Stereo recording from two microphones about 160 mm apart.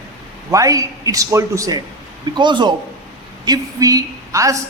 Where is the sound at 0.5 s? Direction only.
20° right (ahead or behind).